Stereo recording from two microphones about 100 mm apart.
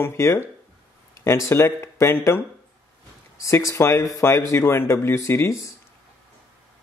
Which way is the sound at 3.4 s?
30° left (ahead or behind).